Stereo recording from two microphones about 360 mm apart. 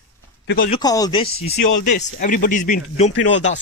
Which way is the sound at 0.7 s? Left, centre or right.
Centre.